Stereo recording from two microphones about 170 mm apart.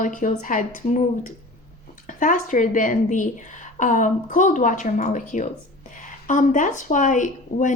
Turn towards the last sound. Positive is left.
turn(degrees=50)  # may be behind; listen again after turning